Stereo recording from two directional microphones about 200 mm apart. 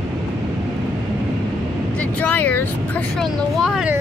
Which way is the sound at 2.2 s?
10° left (ahead or behind).